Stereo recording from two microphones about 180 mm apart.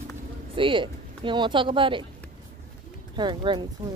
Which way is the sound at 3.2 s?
25° right (ahead or behind).